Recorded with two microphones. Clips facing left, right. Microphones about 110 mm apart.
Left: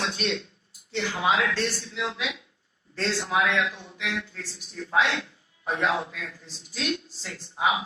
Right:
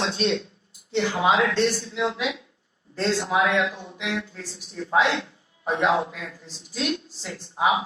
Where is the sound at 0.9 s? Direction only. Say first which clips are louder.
Right 4 dB; 25° right (ahead or behind).